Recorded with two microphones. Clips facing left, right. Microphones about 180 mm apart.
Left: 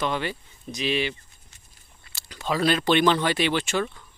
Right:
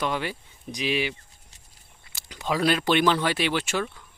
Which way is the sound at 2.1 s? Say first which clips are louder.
Even; 15° right (ahead or behind).